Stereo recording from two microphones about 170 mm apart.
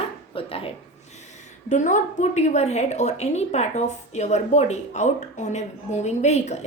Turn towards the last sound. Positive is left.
turn(degrees=40)  # may be behind; listen again after turning